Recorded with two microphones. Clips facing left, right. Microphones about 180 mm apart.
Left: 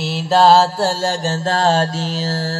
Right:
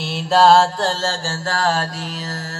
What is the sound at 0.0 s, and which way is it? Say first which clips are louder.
Mantra: left 1 dB; centre (ahead or behind).